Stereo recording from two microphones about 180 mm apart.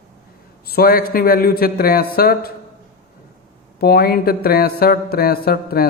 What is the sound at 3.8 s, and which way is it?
Speech, 60° left (ahead or behind).